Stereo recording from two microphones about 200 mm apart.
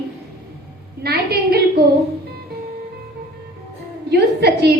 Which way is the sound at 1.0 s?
50° right (ahead or behind).